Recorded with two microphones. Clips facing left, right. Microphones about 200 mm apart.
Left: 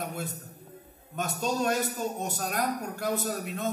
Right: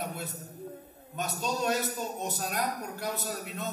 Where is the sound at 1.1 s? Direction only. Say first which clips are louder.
Left 3 dB; 50° left (ahead or behind).